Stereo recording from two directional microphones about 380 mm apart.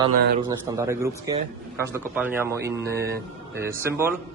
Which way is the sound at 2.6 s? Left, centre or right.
Right.